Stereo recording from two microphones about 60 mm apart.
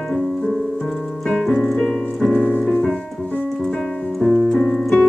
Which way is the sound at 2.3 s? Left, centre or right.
Left.